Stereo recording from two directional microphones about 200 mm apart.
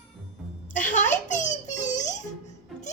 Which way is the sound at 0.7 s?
40° left (ahead or behind).